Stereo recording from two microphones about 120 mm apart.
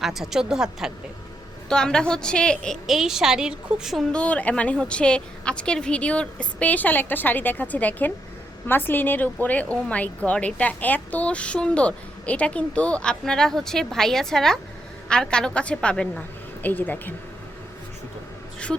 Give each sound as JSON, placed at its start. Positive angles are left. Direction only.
{"t": 0.0, "sound": "a woman's voice", "side_deg": 0}
{"t": 1.7, "sound": "a woman's voice", "side_deg": 5}
{"t": 4.1, "sound": "a woman's voice", "side_deg": 10}